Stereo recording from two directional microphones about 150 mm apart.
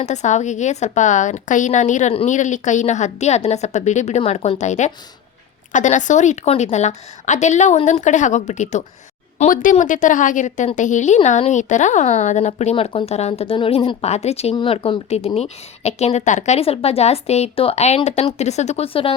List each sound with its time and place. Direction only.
0.0 s a woman's voice: 50° left (ahead or behind)